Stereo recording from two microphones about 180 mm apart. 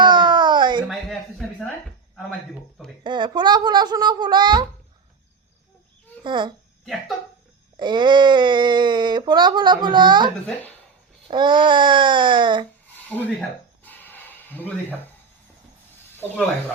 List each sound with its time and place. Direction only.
0.0 s a sound: 25° right (ahead or behind)
0.9 s a sound: centre (ahead or behind)
3.0 s speech: 25° right (ahead or behind)
6.2 s speech: 25° right (ahead or behind)
7.8 s speech: 25° right (ahead or behind)
10.4 s speech: 10° left (ahead or behind)
11.3 s speech: 25° right (ahead or behind)
13.1 s speech: 10° left (ahead or behind)
13.8 s a sound: 10° left (ahead or behind)
16.1 s speech: 10° left (ahead or behind)